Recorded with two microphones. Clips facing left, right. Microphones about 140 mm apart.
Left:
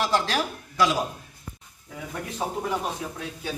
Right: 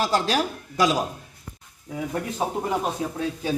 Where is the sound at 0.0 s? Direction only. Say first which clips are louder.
Right 2 dB; 35° right (ahead or behind).